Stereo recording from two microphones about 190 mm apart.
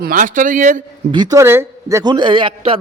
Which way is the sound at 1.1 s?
20° right (ahead or behind).